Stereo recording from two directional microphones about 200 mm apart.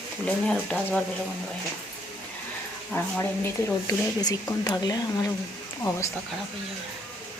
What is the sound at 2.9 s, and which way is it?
A woman's voice, 10° left (ahead or behind).